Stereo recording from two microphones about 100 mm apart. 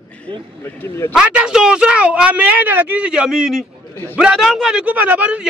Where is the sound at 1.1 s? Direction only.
10° right (ahead or behind).